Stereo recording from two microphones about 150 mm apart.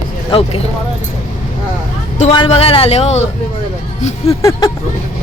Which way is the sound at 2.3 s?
35° left (ahead or behind).